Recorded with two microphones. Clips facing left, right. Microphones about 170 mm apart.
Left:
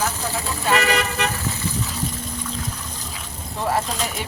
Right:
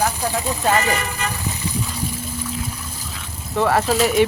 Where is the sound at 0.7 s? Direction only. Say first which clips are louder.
Left 1 dB; 75° left (ahead or behind).